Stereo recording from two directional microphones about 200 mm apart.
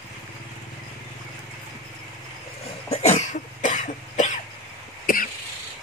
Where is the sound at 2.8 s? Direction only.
35° left (ahead or behind).